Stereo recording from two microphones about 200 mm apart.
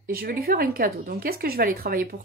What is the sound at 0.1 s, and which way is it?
Speech, 45° right (ahead or behind).